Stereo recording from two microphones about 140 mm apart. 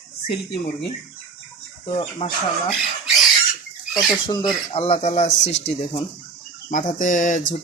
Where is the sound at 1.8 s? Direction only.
40° left (ahead or behind).